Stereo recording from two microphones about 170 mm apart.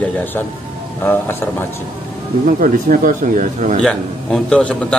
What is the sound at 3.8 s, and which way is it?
A man's voice, 5° left (ahead or behind).